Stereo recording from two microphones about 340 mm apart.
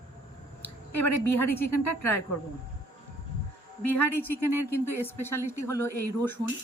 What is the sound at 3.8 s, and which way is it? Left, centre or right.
Speech, left.